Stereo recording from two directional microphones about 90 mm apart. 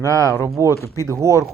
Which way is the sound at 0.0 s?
35° right (ahead or behind).